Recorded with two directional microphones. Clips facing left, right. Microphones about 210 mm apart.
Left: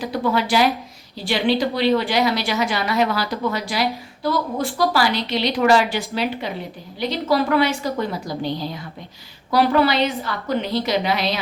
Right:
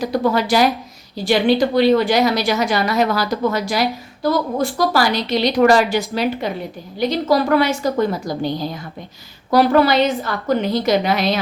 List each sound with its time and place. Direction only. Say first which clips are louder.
0.0 s a woman's voice: right 3 dB; 40° right (ahead or behind)